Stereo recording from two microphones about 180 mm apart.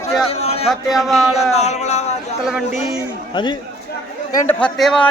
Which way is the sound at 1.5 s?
40° left (ahead or behind).